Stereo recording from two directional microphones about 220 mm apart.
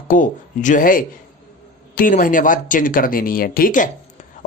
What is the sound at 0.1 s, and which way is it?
Speech, 35° left (ahead or behind).